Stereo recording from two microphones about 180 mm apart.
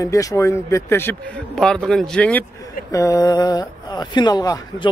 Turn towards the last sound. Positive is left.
turn(degrees=20)  # may be behind; listen again after turning